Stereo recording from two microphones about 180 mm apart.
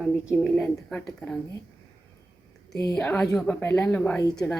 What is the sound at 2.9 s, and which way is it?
A woman's voice, 5° left (ahead or behind).